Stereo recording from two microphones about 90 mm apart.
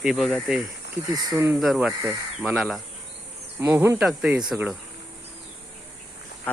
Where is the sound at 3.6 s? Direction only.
25° right (ahead or behind).